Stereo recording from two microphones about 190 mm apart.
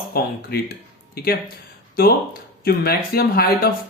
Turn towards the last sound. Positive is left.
turn(degrees=55)  # may be behind; listen again after turning